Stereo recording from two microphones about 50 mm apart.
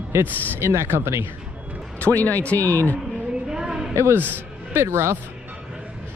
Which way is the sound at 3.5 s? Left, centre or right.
Centre.